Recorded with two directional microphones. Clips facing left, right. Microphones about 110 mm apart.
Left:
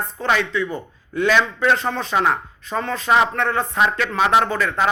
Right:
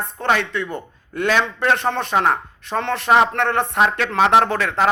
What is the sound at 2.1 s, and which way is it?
Speech, 50° right (ahead or behind).